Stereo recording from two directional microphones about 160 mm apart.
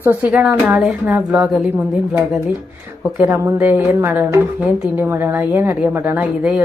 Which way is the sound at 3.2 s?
15° right (ahead or behind).